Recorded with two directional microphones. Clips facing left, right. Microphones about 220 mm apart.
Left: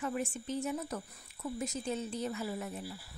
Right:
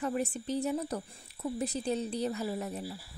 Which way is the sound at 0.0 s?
35° right (ahead or behind).